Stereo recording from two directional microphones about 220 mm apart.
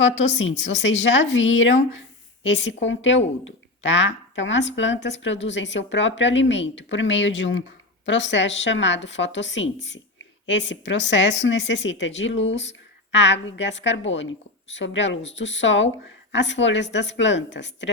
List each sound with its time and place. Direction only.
0.0 s speech: 55° left (ahead or behind)